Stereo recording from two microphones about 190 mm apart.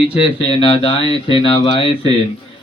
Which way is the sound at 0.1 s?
30° left (ahead or behind).